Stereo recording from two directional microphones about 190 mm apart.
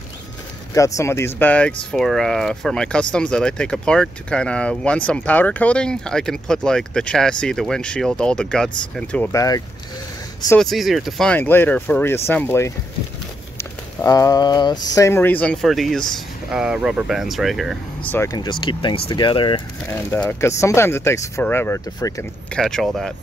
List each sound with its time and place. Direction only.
0.7 s speech: 15° left (ahead or behind)
10.5 s speech: centre (ahead or behind)
18.1 s speech: 15° left (ahead or behind)
19.9 s speech: 10° left (ahead or behind)
22.5 s speech: 5° left (ahead or behind)